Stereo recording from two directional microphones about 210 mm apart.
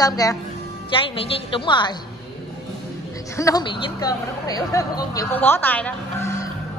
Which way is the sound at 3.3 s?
15° left (ahead or behind).